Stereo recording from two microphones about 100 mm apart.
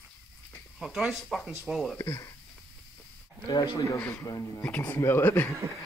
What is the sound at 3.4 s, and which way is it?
Speech, 45° left (ahead or behind).